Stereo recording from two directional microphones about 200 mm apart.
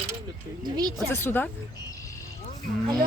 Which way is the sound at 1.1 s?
10° left (ahead or behind).